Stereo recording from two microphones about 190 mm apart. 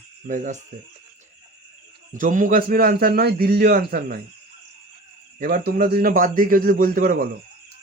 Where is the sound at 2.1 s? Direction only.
45° right (ahead or behind).